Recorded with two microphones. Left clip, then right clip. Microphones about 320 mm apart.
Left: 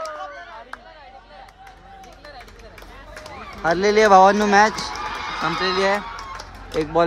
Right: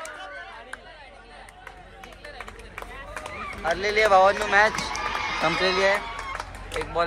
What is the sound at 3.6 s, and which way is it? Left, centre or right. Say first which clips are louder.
Speech: left 6 dB; centre.